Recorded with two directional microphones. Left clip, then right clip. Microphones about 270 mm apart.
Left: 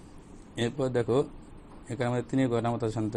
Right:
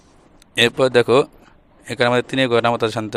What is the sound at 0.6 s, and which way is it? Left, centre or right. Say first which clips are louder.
Speech: right 15 dB; right.